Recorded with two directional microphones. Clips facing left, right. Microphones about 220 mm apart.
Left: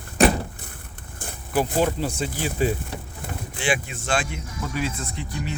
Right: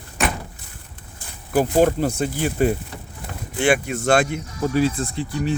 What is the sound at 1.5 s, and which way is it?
Speech, 50° right (ahead or behind).